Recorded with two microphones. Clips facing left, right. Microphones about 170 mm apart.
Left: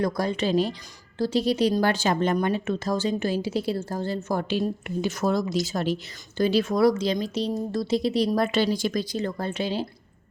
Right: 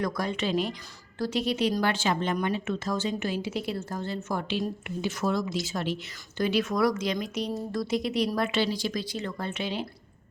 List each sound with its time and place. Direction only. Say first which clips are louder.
0.0 s speech: left 4 dB; 35° left (ahead or behind)
8.4 s speech: left 4 dB; 45° left (ahead or behind)